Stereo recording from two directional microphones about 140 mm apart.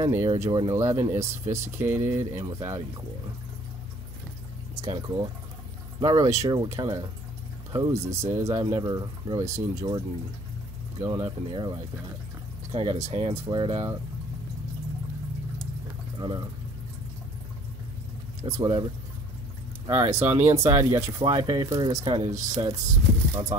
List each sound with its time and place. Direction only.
0.0 s speech: 20° right (ahead or behind)
4.7 s speech: 30° right (ahead or behind)
8.6 s speech: 35° right (ahead or behind)
12.7 s speech: 45° right (ahead or behind)
13.5 s speech: 35° right (ahead or behind)
16.2 s speech: 35° right (ahead or behind)
18.4 s speech: 30° right (ahead or behind)
19.9 s speech: 20° right (ahead or behind)
21.2 s speech: 30° right (ahead or behind)
22.0 s speech: 40° right (ahead or behind)
22.3 s speech: 25° right (ahead or behind)